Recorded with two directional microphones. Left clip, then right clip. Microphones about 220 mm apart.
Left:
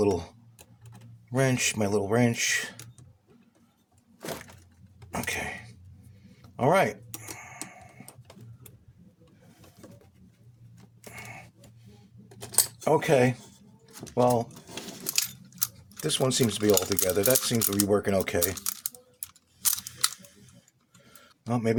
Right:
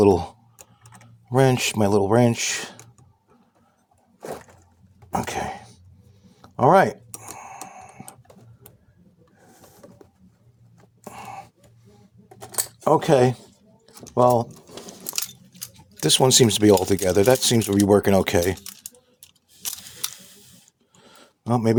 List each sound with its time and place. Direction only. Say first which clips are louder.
0.0 s speech: right 9 dB; 35° right (ahead or behind)
1.3 s speech: right 7 dB; 30° right (ahead or behind)
5.1 s a sound: right 5 dB; 30° right (ahead or behind)
12.8 s speech: right 6 dB; 35° right (ahead or behind)
16.0 s speech: right 9 dB; 40° right (ahead or behind)
21.4 s speech: right 6 dB; 35° right (ahead or behind)